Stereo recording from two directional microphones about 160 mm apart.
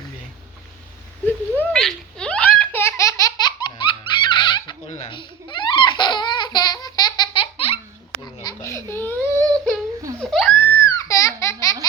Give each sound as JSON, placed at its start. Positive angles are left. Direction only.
{"t": 1.5, "sound": "laughter", "side_deg": 5}
{"t": 5.0, "sound": "baby laughter", "side_deg": 30}
{"t": 8.2, "sound": "baby cry", "side_deg": 25}
{"t": 10.2, "sound": "crying", "side_deg": 0}